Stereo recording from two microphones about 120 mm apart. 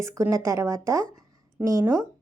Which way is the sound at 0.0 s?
25° right (ahead or behind).